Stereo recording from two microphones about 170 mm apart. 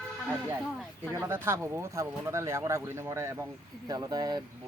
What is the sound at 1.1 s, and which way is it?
Speech, 15° right (ahead or behind).